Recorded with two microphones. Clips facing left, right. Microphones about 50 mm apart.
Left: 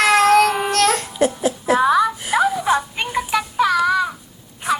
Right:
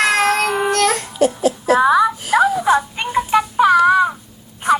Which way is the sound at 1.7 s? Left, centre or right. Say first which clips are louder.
Right 2 dB; centre.